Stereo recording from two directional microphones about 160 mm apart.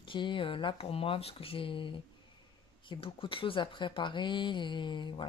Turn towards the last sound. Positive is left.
turn(degrees=30)  # may be behind; listen again after turning